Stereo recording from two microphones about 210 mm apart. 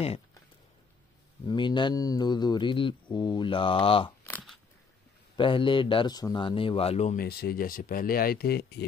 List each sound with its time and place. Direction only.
1.5 s speech: 20° left (ahead or behind)
4.3 s a sound: 5° left (ahead or behind)
5.3 s speech: 25° left (ahead or behind)
7.2 s speech: 50° left (ahead or behind)